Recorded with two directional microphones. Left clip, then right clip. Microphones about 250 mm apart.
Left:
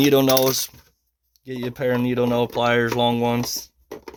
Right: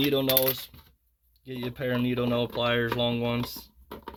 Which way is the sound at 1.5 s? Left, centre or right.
Left.